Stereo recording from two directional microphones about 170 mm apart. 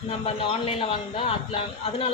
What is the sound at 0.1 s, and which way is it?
Speech, 35° left (ahead or behind).